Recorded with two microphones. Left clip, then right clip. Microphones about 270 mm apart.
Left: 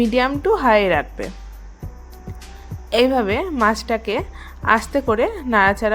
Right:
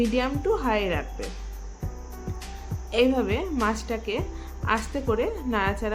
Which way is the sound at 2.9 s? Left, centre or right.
Left.